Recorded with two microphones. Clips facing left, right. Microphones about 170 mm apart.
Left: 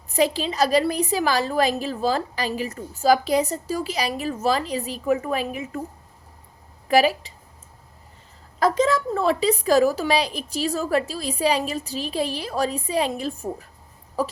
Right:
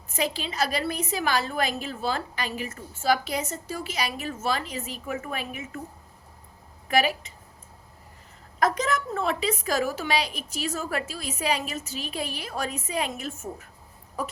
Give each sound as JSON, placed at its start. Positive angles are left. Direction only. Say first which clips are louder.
{"t": 0.1, "sound": "a woman's voice", "louder": "left 8 dB", "side_deg": 35}
{"t": 6.8, "sound": "speech", "louder": "left 6 dB", "side_deg": 35}
{"t": 8.5, "sound": "a woman's voice", "louder": "left 5 dB", "side_deg": 30}